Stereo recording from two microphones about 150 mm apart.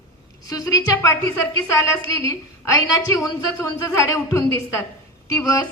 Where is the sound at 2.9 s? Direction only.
20° left (ahead or behind).